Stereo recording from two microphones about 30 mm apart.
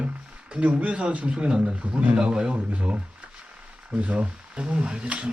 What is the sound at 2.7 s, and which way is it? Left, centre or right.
Speech, right.